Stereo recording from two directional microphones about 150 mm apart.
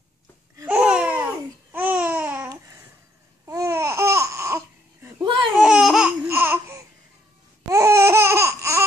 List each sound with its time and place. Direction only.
0.7 s babbling: 5° right (ahead or behind)
5.6 s laughter: 5° right (ahead or behind)
6.2 s laughter: 15° right (ahead or behind)